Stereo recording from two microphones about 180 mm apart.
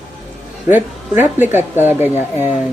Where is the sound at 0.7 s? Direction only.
10° right (ahead or behind).